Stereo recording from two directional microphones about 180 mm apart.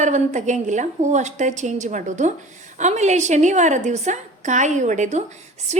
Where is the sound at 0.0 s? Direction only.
40° right (ahead or behind).